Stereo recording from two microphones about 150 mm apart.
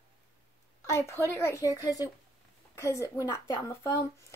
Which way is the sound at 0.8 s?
20° left (ahead or behind).